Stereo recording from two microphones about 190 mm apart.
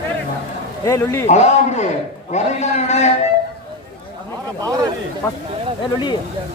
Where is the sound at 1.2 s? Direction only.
35° left (ahead or behind).